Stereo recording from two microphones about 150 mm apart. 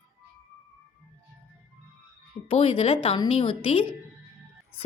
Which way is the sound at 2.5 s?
35° left (ahead or behind).